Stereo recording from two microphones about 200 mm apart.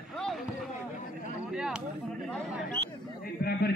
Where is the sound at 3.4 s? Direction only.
50° left (ahead or behind).